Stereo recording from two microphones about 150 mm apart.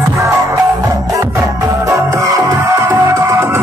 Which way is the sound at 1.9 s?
20° right (ahead or behind).